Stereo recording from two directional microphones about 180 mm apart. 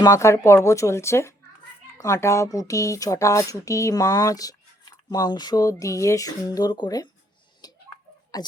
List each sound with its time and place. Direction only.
0.0 s speech: 15° left (ahead or behind)
7.6 s a sound: 20° left (ahead or behind)
8.3 s speech: 20° left (ahead or behind)